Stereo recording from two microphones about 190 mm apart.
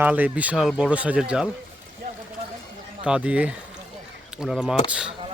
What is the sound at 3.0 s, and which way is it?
Speech, 5° right (ahead or behind).